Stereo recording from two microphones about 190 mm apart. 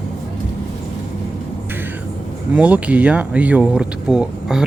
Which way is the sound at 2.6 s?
5° right (ahead or behind).